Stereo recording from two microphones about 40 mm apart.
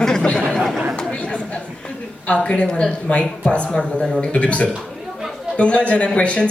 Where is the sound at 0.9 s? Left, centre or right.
Left.